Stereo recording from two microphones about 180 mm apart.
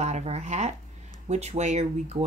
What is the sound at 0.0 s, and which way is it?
Speech, 40° right (ahead or behind).